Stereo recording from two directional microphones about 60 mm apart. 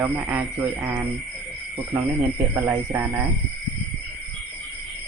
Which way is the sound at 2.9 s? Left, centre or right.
Right.